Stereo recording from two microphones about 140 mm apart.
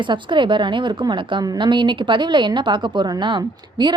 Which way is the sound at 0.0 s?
35° right (ahead or behind).